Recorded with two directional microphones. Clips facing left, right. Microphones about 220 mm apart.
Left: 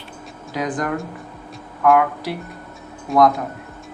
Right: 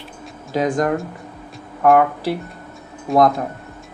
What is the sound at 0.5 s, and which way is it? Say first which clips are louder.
Speech: right 5 dB; 25° right (ahead or behind).